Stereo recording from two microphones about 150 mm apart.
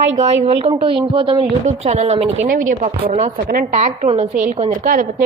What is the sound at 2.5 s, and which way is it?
A woman's voice, 60° right (ahead or behind).